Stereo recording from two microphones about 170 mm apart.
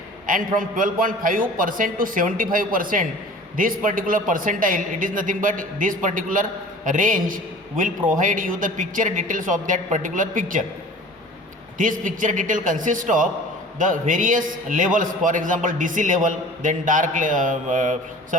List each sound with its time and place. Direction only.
0.3 s a man's voice: 55° right (ahead or behind)
11.8 s a man's voice: 50° right (ahead or behind)